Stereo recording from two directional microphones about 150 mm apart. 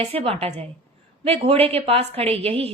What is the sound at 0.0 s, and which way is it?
A woman's voice, 40° right (ahead or behind).